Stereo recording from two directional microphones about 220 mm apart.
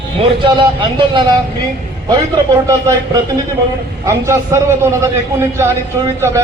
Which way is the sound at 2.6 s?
15° right (ahead or behind).